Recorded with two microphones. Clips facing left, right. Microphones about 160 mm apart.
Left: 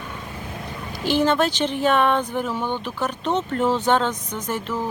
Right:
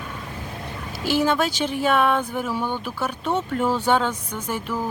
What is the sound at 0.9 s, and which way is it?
Speech, 10° right (ahead or behind).